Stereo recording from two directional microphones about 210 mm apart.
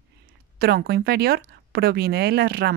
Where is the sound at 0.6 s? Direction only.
45° right (ahead or behind).